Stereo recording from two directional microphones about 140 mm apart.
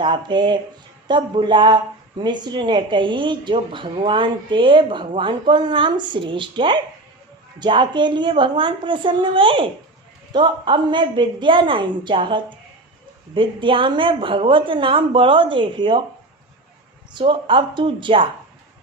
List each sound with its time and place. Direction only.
0.0 s speech: 35° right (ahead or behind)
17.1 s speech: 35° right (ahead or behind)